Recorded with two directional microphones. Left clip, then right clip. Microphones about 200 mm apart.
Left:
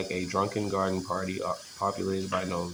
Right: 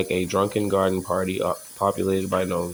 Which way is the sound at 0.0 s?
35° right (ahead or behind).